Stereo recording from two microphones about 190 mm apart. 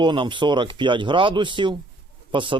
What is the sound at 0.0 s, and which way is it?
Speech, 25° right (ahead or behind).